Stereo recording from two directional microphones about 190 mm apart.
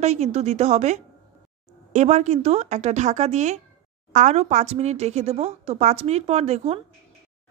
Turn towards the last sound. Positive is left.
turn(degrees=-35)  # may be behind; listen again after turning